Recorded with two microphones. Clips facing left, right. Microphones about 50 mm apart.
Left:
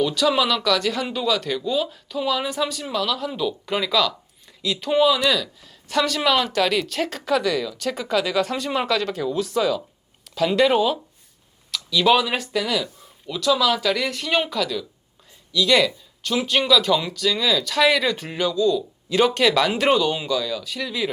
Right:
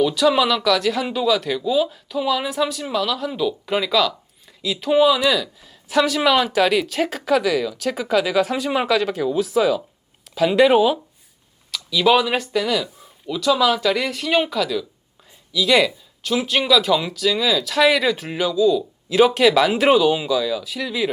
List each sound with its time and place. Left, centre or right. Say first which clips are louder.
0.0 s speech: right 3 dB; centre